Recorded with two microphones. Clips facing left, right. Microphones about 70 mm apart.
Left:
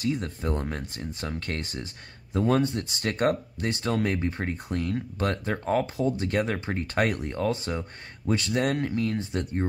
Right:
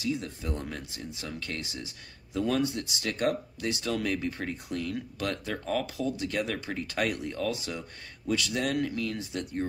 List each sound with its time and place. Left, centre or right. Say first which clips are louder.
0.0 s speech: left 4 dB; left